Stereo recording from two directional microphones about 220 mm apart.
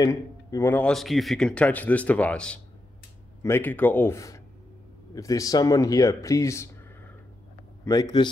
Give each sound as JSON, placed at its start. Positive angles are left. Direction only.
{"t": 0.0, "sound": "speech", "side_deg": 15}